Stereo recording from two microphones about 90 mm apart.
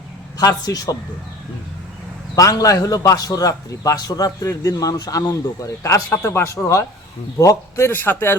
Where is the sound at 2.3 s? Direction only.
40° left (ahead or behind).